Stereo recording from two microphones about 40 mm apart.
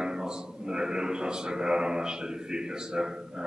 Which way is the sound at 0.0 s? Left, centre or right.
Centre.